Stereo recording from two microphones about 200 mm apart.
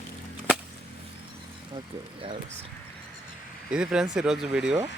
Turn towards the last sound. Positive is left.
turn(degrees=-5)  # may be behind; listen again after turning